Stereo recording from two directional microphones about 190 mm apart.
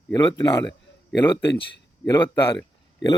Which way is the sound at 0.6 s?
5° left (ahead or behind).